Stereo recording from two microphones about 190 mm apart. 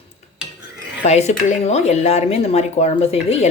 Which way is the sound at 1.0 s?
35° left (ahead or behind).